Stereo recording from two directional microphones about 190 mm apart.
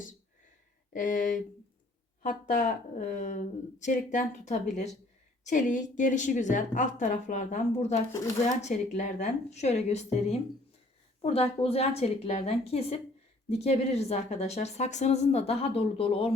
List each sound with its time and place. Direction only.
0.9 s a woman's voice: 45° left (ahead or behind)